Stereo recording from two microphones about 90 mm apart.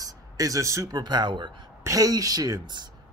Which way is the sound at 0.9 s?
50° right (ahead or behind).